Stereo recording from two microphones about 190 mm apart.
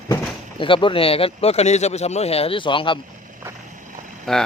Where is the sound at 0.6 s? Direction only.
25° left (ahead or behind).